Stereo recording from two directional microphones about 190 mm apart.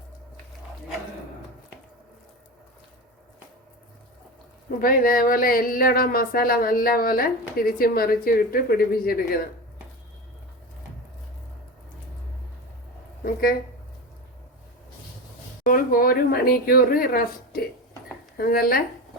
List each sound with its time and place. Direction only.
4.8 s speech: 50° left (ahead or behind)
15.6 s speech: 45° left (ahead or behind)